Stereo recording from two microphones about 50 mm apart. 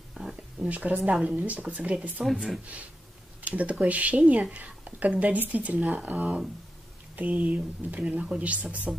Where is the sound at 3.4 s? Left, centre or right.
Right.